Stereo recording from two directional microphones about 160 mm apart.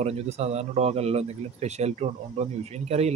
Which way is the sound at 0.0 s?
40° right (ahead or behind).